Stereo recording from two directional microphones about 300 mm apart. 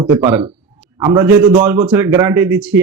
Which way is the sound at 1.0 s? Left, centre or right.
Centre.